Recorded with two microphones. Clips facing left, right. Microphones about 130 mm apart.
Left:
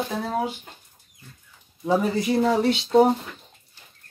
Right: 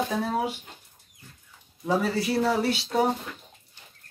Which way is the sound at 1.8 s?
20° left (ahead or behind).